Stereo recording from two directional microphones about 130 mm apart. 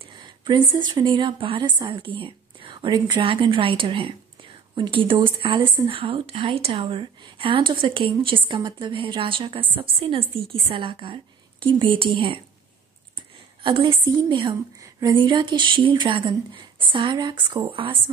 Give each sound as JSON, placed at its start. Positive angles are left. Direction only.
{"t": 0.2, "sound": "a woman's voice", "side_deg": -35}
{"t": 13.7, "sound": "a woman's voice", "side_deg": -40}